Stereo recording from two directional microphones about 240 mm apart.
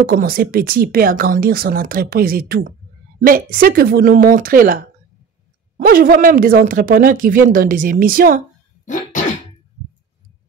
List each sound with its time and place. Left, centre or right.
0.0 s speech: right
8.8 s throat clearing: left